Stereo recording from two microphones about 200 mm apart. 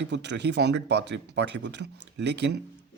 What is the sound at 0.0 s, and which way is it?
Speech, 60° right (ahead or behind).